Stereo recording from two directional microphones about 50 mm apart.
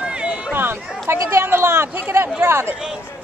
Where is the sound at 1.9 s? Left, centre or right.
Right.